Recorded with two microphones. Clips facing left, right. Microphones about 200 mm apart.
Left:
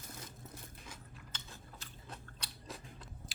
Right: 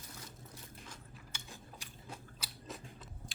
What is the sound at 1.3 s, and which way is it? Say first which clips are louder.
Biting: right 3 dB; 15° right (ahead or behind).